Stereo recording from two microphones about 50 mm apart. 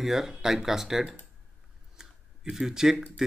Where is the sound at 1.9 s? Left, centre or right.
Centre.